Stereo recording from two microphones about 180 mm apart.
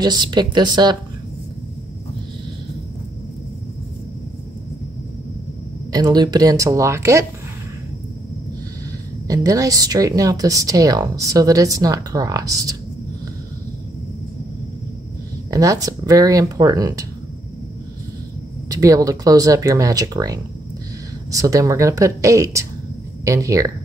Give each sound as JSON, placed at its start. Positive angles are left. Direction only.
{"t": 0.0, "sound": "speech", "side_deg": -25}
{"t": 5.9, "sound": "speech", "side_deg": -20}
{"t": 9.3, "sound": "speech", "side_deg": -20}
{"t": 15.5, "sound": "speech", "side_deg": -20}
{"t": 18.7, "sound": "speech", "side_deg": -20}